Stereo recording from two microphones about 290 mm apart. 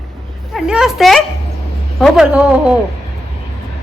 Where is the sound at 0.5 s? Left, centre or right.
Centre.